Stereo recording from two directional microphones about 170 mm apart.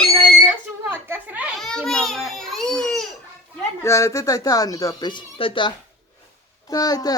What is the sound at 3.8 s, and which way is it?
Speech, 15° left (ahead or behind).